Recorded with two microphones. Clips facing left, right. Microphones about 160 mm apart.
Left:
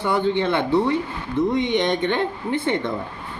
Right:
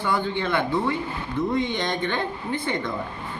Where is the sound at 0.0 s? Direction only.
25° left (ahead or behind).